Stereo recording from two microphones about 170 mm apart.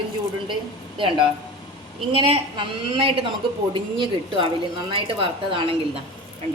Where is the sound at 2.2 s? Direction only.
30° right (ahead or behind).